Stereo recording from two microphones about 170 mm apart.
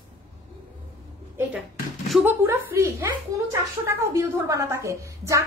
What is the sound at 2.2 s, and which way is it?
A woman's voice, 15° right (ahead or behind).